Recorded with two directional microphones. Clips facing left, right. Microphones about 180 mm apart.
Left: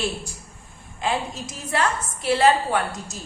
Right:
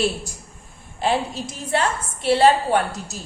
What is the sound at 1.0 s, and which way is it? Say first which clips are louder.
A woman's voice: right 4 dB; 30° right (ahead or behind).